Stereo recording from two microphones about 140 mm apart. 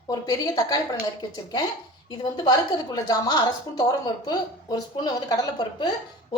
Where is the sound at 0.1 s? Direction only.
25° left (ahead or behind).